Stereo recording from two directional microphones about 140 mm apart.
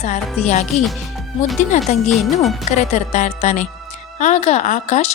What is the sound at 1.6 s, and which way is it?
Speech, 60° left (ahead or behind).